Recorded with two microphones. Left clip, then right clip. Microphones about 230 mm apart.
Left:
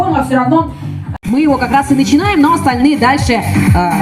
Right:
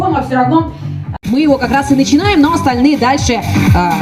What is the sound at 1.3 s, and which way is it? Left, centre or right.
A woman's voice, right.